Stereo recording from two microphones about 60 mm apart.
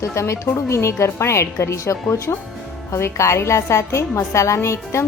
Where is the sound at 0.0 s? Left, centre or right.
Left.